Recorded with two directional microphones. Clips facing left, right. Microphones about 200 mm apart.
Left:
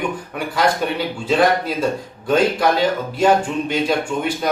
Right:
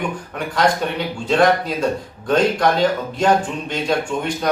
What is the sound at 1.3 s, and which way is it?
A man's voice, 5° left (ahead or behind).